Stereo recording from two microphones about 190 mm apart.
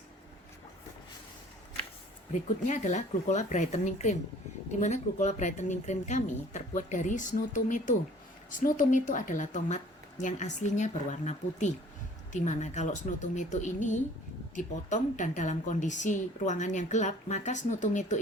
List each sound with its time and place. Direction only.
2.6 s a woman's voice: 40° left (ahead or behind)